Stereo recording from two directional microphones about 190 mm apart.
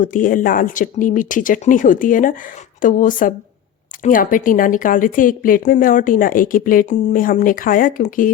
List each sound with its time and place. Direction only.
0.0 s speech: 45° left (ahead or behind)